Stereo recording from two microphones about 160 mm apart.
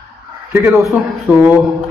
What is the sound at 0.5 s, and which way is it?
A man's voice, 15° right (ahead or behind).